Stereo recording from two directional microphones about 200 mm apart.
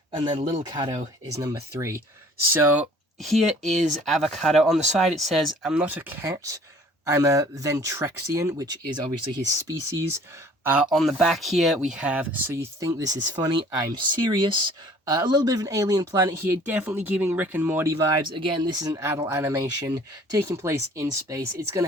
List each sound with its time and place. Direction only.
0.2 s speech: 25° right (ahead or behind)
1.3 s speech: 15° right (ahead or behind)
3.2 s speech: centre (ahead or behind); by 21.8 s 15° right (ahead or behind)